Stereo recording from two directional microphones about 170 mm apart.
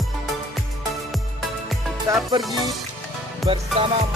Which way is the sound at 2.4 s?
Centre (ahead or behind).